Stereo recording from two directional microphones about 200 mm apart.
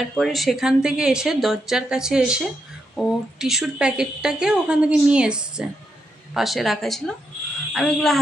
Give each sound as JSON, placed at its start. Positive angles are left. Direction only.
{"t": 0.2, "sound": "a woman's voice", "side_deg": 0}